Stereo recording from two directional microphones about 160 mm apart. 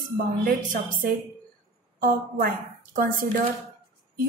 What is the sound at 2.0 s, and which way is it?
A woman's voice, 65° right (ahead or behind).